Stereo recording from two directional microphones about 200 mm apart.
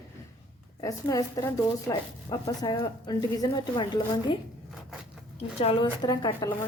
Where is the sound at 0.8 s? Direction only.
15° left (ahead or behind).